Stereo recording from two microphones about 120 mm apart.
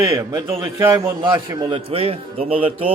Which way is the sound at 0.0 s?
25° right (ahead or behind).